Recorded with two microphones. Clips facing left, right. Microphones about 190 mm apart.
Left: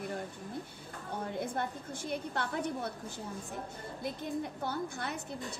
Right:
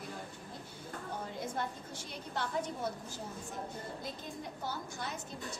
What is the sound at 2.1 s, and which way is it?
Speech, 60° left (ahead or behind).